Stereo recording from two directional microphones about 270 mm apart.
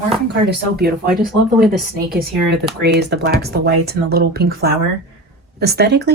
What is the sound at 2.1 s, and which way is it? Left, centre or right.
Speech, right.